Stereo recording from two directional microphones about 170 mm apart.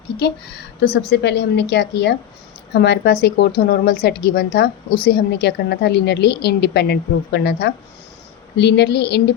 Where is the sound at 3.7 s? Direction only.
70° left (ahead or behind).